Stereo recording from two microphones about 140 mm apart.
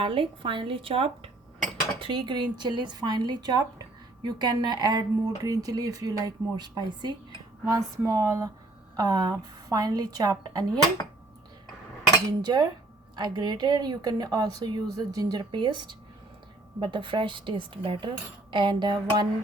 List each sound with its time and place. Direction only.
0.0 s speech: 40° right (ahead or behind)
12.4 s speech: 30° right (ahead or behind)